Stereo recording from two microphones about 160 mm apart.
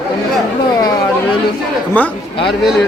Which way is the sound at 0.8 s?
25° left (ahead or behind).